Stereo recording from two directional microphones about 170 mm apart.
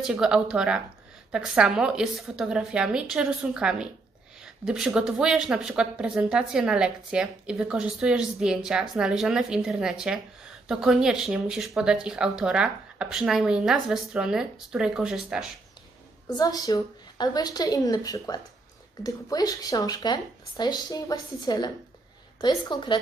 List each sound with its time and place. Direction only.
0.0 s speech: 5° right (ahead or behind)
16.3 s speech: 25° left (ahead or behind)